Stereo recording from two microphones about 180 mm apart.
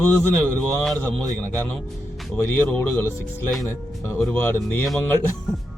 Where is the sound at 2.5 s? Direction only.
10° left (ahead or behind).